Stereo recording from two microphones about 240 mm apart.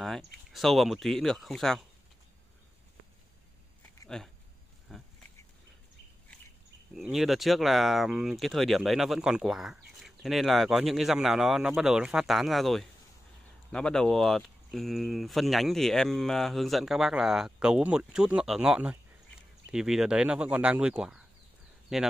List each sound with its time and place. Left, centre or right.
0.0 s speech: centre
4.1 s speech: centre
4.9 s pig: centre
7.0 s speech: centre